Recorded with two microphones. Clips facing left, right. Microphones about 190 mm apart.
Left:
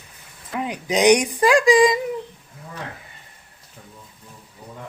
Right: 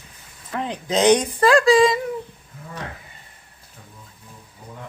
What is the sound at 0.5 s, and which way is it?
Speech, 10° left (ahead or behind).